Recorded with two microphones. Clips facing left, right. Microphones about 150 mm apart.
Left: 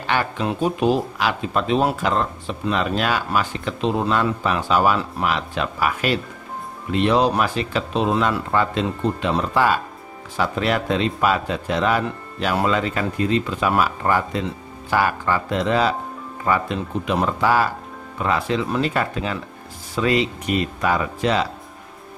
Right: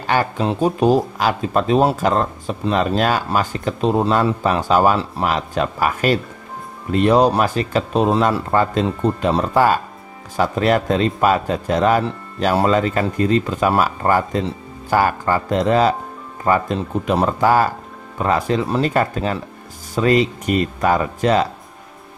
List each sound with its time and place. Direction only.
0.0 s speech: 40° right (ahead or behind)